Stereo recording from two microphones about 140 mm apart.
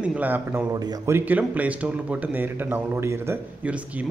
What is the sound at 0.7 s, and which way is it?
Speech, 25° right (ahead or behind).